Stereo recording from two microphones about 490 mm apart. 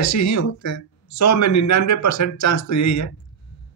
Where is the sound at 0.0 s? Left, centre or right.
Left.